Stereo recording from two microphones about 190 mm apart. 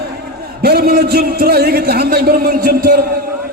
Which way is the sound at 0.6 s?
55° right (ahead or behind).